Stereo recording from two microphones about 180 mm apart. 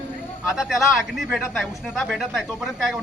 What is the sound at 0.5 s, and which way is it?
Speech, 5° right (ahead or behind).